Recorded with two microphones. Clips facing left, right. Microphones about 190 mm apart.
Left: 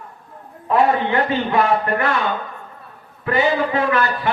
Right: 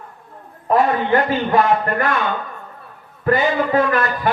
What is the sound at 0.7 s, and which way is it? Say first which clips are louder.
A man's voice: right 1 dB; 40° right (ahead or behind).